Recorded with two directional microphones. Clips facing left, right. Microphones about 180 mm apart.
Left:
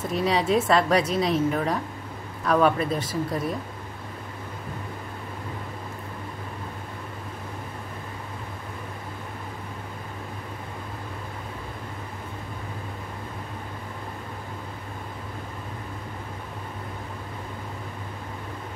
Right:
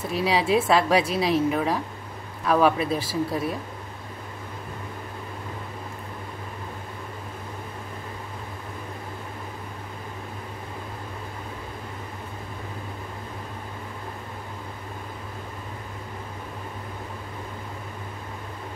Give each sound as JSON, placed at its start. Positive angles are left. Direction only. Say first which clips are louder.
{"t": 0.0, "sound": "a woman's voice", "louder": "even", "side_deg": -5}